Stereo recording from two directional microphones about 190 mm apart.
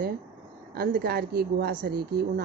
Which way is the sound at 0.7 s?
55° right (ahead or behind).